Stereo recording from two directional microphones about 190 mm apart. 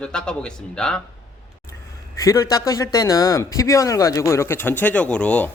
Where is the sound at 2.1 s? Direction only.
15° left (ahead or behind).